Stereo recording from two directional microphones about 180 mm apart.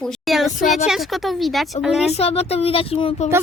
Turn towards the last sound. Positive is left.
turn(degrees=35)  # may be behind; listen again after turning